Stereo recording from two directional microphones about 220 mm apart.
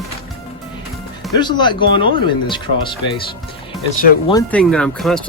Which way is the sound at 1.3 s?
20° left (ahead or behind).